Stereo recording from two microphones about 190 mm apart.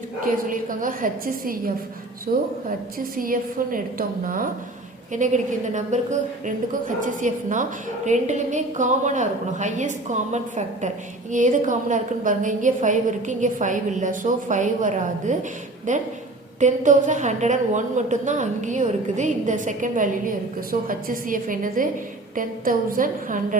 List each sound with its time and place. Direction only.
0.5 s a woman's voice: 45° right (ahead or behind)